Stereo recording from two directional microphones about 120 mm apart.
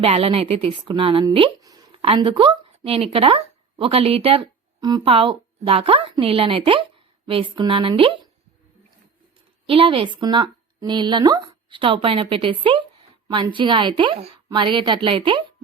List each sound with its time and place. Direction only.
0.0 s speech: 50° right (ahead or behind)
4.8 s speech: 35° right (ahead or behind)
5.0 s speech: 50° right (ahead or behind)
9.6 s speech: 45° right (ahead or behind)
14.5 s speech: 40° right (ahead or behind)